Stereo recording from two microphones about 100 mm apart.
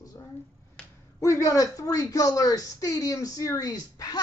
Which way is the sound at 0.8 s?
10° left (ahead or behind).